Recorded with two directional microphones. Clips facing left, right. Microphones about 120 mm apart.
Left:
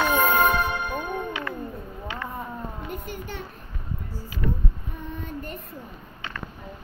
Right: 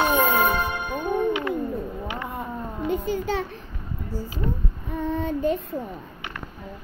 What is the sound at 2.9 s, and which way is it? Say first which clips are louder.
Speech: right 10 dB; 90° right.